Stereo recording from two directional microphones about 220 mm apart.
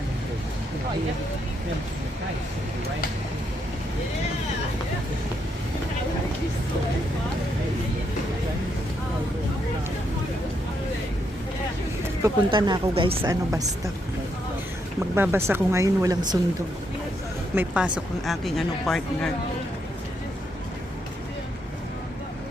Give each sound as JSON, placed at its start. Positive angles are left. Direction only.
{"t": 12.2, "sound": "speech", "side_deg": -20}
{"t": 15.1, "sound": "speech", "side_deg": -10}
{"t": 17.5, "sound": "speech", "side_deg": -5}